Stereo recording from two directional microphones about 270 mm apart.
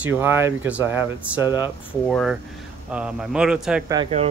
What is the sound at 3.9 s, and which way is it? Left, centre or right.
Speech, right.